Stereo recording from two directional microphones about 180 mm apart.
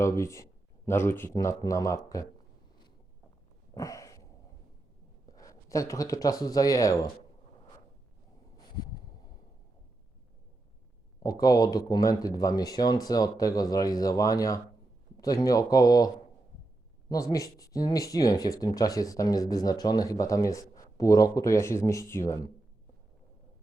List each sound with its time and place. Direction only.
0.0 s speech: 15° left (ahead or behind)
3.8 s a sound: 20° left (ahead or behind)
5.4 s speech: 20° left (ahead or behind)
11.2 s speech: 20° left (ahead or behind)